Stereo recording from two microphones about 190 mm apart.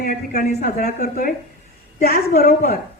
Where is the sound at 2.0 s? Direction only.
50° left (ahead or behind).